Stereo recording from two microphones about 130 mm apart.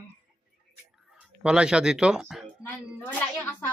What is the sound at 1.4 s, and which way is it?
Speech, 5° right (ahead or behind).